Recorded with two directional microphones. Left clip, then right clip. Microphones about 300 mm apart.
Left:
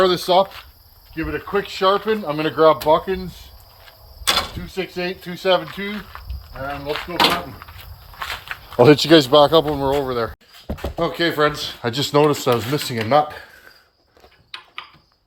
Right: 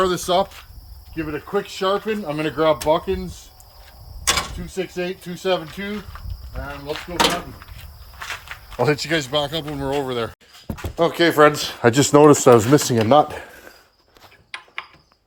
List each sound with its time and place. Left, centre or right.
0.0 s speech: centre
4.6 s speech: centre
6.5 s speech: centre
8.8 s speech: left
10.0 s speech: centre; by 13.7 s right